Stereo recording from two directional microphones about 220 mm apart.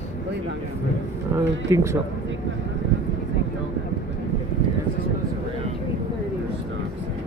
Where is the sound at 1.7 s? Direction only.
10° right (ahead or behind).